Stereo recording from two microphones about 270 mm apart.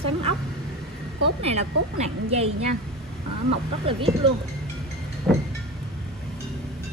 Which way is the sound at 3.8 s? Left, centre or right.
Centre.